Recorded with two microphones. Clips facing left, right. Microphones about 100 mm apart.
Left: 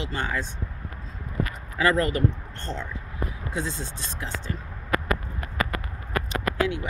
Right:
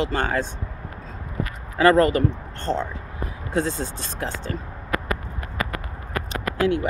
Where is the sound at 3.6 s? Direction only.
45° right (ahead or behind).